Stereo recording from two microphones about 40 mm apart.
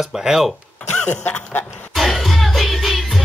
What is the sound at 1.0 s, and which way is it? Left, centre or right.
Cough, left.